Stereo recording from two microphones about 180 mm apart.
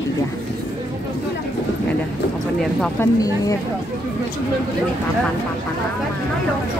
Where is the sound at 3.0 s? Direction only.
20° left (ahead or behind).